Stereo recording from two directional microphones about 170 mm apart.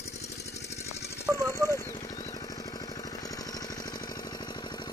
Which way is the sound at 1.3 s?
15° left (ahead or behind).